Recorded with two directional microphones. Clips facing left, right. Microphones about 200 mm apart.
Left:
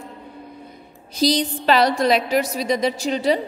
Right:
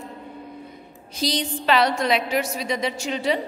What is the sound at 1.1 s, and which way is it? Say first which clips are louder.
A woman's voice: left 6 dB; 35° left (ahead or behind).